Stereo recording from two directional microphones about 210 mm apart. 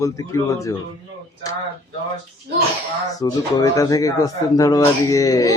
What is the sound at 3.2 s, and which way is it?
Speech, 15° left (ahead or behind).